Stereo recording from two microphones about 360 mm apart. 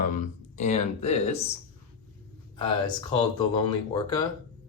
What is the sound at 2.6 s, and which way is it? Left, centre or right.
Speech, centre.